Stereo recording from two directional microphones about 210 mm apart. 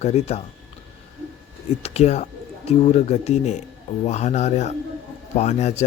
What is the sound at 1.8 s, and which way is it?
Speech, 30° left (ahead or behind).